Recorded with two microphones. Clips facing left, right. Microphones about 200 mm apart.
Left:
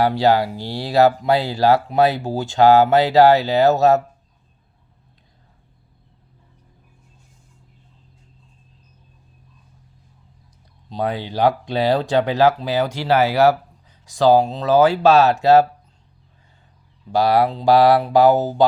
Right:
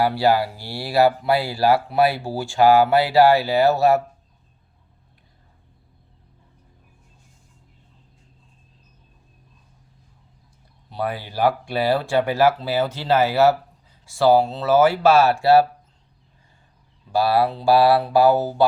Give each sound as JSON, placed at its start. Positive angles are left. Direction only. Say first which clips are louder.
{"t": 0.0, "sound": "speech", "louder": "left 2 dB", "side_deg": 20}
{"t": 10.8, "sound": "speech", "louder": "left 3 dB", "side_deg": 20}
{"t": 17.2, "sound": "speech", "louder": "left 2 dB", "side_deg": 20}